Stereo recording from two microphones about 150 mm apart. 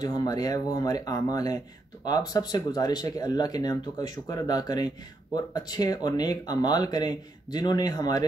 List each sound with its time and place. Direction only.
0.0 s speech: 25° left (ahead or behind)